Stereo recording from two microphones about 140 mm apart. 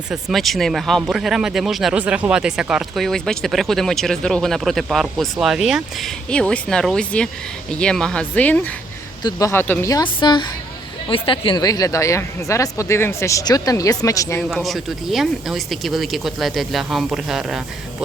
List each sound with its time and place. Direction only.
0.1 s speech: centre (ahead or behind)
9.9 s a woman's voice: 35° left (ahead or behind)
14.5 s speech: centre (ahead or behind)